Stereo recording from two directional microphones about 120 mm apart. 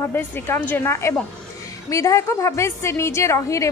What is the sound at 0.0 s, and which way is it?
A woman's voice, 20° left (ahead or behind).